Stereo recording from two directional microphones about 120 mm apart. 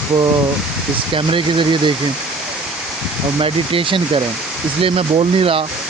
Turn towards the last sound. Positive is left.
turn(degrees=-50)  # may be behind; listen again after turning